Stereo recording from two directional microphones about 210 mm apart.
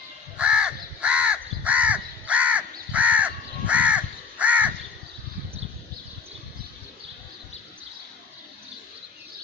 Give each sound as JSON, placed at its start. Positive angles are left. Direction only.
{"t": 0.4, "sound": "crow", "side_deg": -5}